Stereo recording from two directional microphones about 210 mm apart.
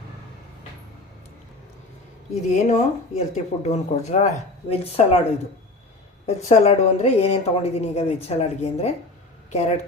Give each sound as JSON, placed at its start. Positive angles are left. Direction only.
{"t": 2.3, "sound": "a woman's voice", "side_deg": 35}
{"t": 6.2, "sound": "a woman's voice", "side_deg": 30}